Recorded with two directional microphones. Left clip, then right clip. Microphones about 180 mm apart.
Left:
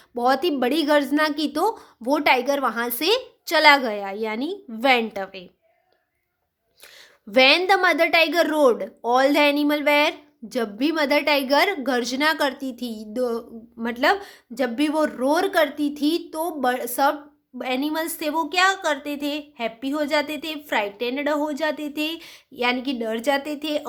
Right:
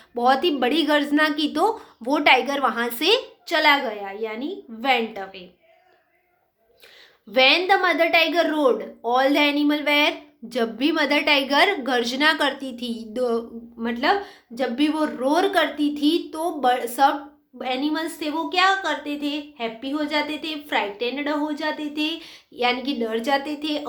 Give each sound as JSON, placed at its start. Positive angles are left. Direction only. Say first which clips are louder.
{"t": 0.1, "sound": "a woman's voice", "louder": "right 1 dB", "side_deg": 40}
{"t": 7.3, "sound": "a woman's voice", "louder": "left 1 dB", "side_deg": 40}